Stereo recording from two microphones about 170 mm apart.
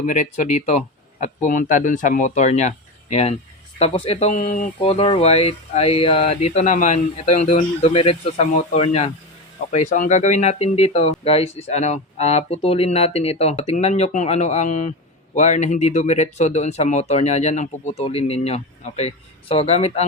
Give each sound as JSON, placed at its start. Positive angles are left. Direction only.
{"t": 0.0, "sound": "speech", "side_deg": 45}
{"t": 4.8, "sound": "speech", "side_deg": 35}